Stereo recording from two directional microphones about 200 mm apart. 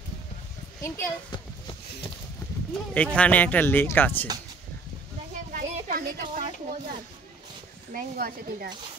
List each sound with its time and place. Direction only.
0.8 s speech: 10° left (ahead or behind)
2.9 s speech: 5° left (ahead or behind)
5.5 s a sound: 45° right (ahead or behind)
7.9 s speech: 45° right (ahead or behind)